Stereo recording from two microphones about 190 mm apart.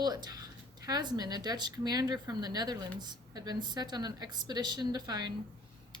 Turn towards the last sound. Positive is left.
turn(degrees=-20)  # may be behind; listen again after turning